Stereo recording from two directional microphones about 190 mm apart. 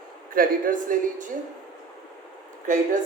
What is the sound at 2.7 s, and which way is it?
Speech, 45° right (ahead or behind).